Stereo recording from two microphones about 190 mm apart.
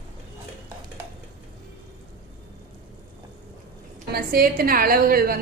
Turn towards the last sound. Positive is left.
turn(degrees=-50)  # may be behind; listen again after turning